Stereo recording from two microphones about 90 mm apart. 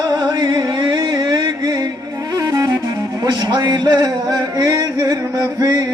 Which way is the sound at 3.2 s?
50° right (ahead or behind).